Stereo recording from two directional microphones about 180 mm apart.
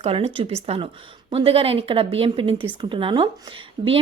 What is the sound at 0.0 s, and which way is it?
A woman's voice, 35° right (ahead or behind).